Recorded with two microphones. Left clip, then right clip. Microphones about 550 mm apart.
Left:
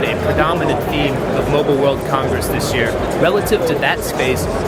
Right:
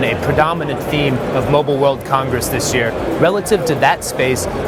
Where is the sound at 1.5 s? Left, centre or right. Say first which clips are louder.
Right 1 dB; right.